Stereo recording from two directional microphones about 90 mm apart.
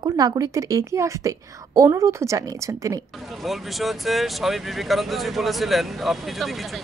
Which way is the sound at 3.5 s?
Centre (ahead or behind).